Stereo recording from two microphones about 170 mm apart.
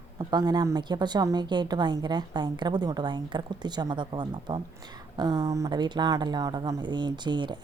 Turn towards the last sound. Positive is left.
turn(degrees=-25)  # may be behind; listen again after turning